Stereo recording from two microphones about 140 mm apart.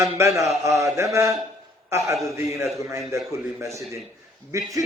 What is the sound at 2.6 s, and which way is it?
A man's voice, 20° right (ahead or behind).